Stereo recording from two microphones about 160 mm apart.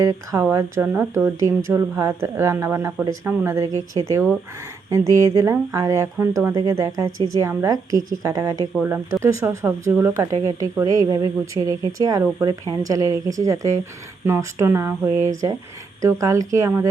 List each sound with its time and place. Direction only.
0.0 s speech: 20° right (ahead or behind)